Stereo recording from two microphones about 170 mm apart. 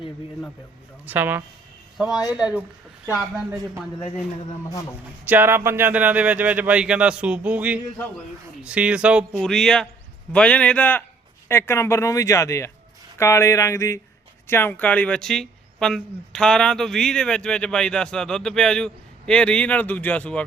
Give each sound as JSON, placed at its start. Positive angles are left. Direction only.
{"t": 1.0, "sound": "speech", "side_deg": -10}
{"t": 4.7, "sound": "a man's voice", "side_deg": 20}
{"t": 5.2, "sound": "a man's voice", "side_deg": -10}